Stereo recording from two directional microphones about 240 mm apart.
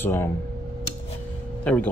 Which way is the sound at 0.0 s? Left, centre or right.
Centre.